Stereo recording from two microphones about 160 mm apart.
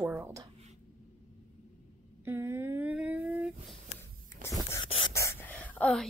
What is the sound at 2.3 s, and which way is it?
Speech, 15° right (ahead or behind).